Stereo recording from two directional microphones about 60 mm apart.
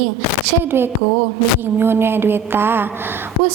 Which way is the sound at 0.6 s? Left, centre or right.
Right.